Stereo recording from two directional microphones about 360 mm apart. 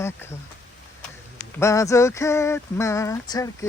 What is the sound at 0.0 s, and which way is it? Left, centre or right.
Speech, centre.